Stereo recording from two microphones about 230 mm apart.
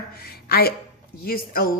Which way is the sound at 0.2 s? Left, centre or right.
Left.